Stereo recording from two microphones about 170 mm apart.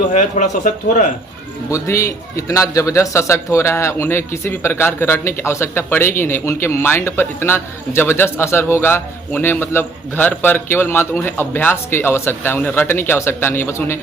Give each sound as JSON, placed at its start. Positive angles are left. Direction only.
{"t": 0.1, "sound": "speech", "side_deg": 45}
{"t": 1.7, "sound": "a man's voice", "side_deg": 15}